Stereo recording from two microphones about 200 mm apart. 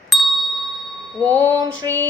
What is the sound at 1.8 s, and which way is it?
Music, 10° left (ahead or behind).